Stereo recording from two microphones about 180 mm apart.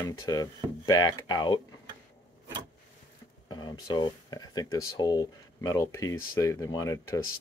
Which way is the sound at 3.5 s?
25° left (ahead or behind).